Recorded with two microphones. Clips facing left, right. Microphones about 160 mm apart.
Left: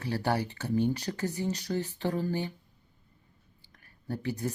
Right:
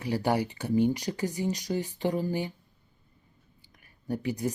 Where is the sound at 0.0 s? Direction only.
15° right (ahead or behind).